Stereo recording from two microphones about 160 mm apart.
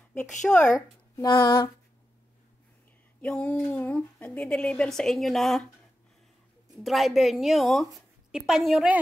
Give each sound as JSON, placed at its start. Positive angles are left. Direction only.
{"t": 0.1, "sound": "a woman's voice", "side_deg": 5}
{"t": 0.7, "sound": "speech", "side_deg": 20}
{"t": 3.2, "sound": "speech", "side_deg": 5}
{"t": 6.8, "sound": "a woman's voice", "side_deg": 0}